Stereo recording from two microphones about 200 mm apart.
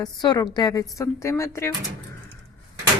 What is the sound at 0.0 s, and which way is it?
A woman's voice, 20° left (ahead or behind).